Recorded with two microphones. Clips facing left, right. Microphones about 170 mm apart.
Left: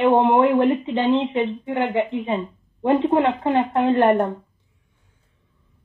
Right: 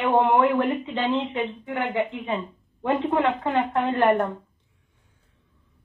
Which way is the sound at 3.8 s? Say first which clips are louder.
Left 4 dB; 45° left (ahead or behind).